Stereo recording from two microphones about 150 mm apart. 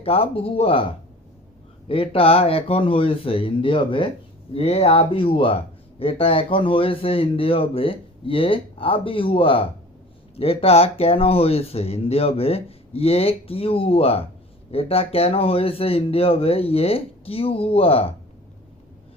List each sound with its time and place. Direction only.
0.0 s speech: 40° left (ahead or behind)